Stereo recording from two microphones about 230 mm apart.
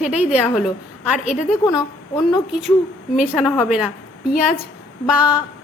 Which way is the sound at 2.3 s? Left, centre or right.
Centre.